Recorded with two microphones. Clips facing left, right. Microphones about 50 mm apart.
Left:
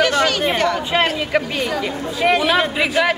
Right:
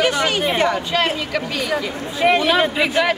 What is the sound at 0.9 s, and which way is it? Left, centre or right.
Speech, left.